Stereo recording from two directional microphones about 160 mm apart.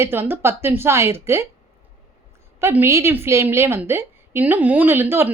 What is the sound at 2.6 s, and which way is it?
A woman's voice, 15° right (ahead or behind).